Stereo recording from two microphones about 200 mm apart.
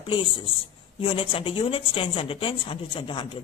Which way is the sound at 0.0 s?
25° left (ahead or behind).